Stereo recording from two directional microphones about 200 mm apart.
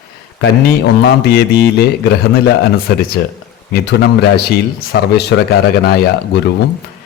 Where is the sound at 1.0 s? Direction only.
50° left (ahead or behind).